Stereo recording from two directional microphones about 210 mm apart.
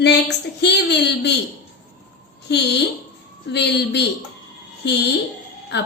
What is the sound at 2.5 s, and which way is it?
Speech, 55° left (ahead or behind).